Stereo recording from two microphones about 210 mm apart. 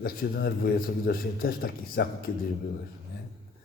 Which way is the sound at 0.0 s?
45° left (ahead or behind).